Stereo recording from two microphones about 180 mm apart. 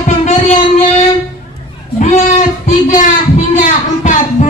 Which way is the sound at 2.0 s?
40° left (ahead or behind).